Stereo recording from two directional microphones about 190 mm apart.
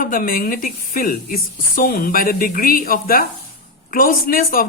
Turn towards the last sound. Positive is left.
turn(degrees=50)  # may be behind; listen again after turning